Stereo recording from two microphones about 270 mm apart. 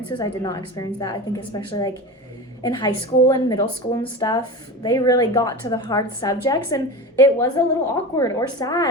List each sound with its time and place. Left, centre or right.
0.1 s a woman's voice: centre